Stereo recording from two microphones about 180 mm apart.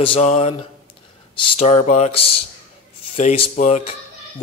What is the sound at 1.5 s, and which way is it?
Speech, 40° left (ahead or behind).